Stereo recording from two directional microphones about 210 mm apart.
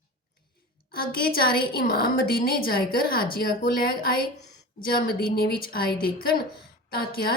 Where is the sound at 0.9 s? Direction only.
45° left (ahead or behind).